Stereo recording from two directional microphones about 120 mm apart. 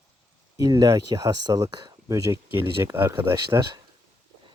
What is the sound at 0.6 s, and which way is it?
Speech, 30° right (ahead or behind).